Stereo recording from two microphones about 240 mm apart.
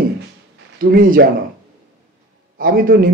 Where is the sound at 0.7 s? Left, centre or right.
Right.